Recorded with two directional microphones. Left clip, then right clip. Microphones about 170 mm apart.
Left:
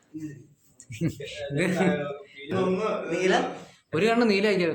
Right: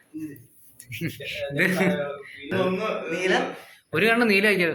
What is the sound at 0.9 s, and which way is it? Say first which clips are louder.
Speech: right 1 dB; 35° left (ahead or behind).